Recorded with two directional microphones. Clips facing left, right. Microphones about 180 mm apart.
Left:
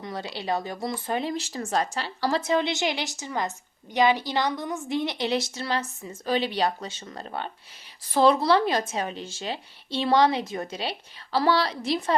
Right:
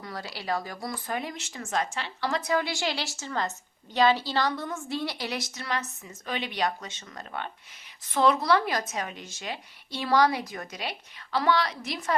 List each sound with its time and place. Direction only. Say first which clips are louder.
0.0 s speech: left 4 dB; 20° left (ahead or behind)